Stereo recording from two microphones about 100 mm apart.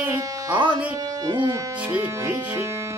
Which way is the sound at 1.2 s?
50° right (ahead or behind).